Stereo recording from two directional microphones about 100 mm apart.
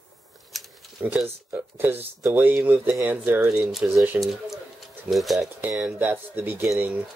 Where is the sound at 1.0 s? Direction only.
20° right (ahead or behind).